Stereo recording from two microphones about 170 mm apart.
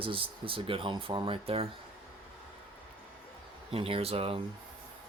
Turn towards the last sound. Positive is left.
turn(degrees=-35)  # may be behind; listen again after turning